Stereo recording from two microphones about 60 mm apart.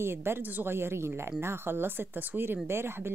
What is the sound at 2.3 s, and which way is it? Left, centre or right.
Speech, right.